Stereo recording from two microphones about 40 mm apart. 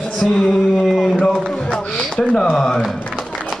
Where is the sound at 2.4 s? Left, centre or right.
Centre.